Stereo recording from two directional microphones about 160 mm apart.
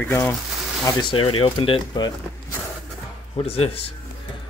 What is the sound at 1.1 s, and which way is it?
Speech, 35° left (ahead or behind).